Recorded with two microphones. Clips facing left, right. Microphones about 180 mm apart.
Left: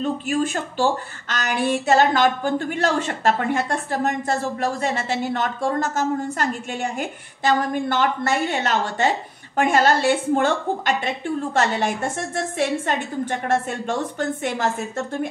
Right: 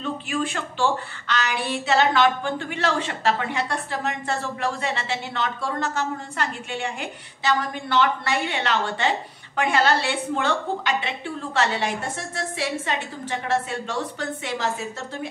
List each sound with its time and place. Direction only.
0.0 s speech: 45° left (ahead or behind)